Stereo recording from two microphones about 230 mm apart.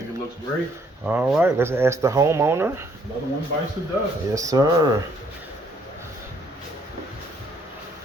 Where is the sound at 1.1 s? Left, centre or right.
Centre.